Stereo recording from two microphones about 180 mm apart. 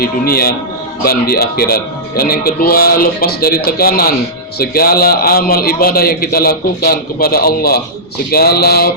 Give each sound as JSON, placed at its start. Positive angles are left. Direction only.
{"t": 0.0, "sound": "a man's voice", "side_deg": 55}